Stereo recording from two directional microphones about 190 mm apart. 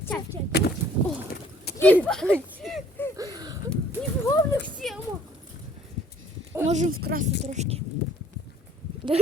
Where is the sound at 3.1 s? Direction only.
20° right (ahead or behind).